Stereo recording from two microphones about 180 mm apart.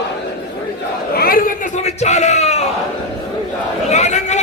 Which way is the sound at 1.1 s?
55° left (ahead or behind).